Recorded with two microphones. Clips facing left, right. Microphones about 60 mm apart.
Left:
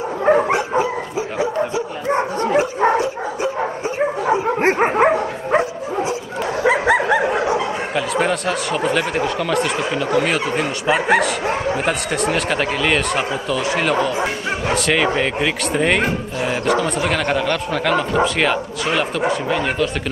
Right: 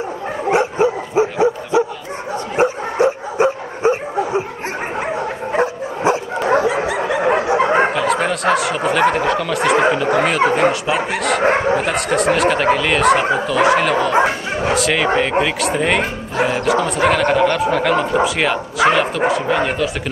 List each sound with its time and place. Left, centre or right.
0.5 s dog: right
5.6 s dog: right
7.2 s bow-wow: right
7.9 s speech: centre